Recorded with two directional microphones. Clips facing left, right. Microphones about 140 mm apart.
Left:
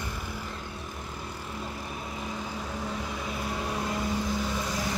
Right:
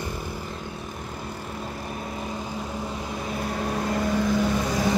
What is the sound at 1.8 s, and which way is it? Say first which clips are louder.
Vehicle: right 4 dB; 45° right (ahead or behind).